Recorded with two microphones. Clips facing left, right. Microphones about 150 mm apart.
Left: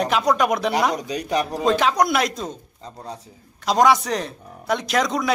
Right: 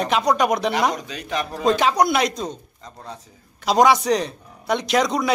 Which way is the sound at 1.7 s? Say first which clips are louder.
Right 2 dB; centre (ahead or behind).